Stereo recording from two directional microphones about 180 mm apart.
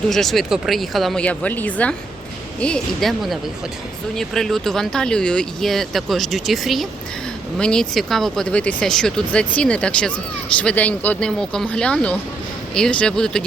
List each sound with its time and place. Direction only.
0.1 s speech: centre (ahead or behind)